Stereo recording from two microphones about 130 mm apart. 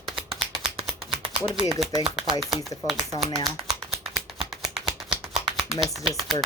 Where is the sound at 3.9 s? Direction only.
5° right (ahead or behind).